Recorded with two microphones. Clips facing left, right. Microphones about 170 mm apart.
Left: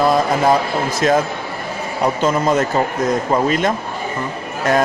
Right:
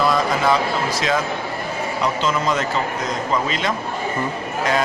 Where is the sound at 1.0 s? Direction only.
50° left (ahead or behind).